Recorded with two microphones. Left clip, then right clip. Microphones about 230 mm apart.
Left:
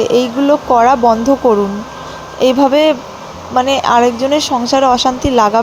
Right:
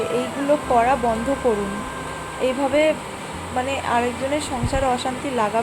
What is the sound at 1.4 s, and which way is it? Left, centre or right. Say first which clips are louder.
Speech: left 10 dB; left.